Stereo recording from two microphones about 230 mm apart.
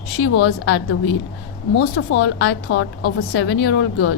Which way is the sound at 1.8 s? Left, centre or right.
Left.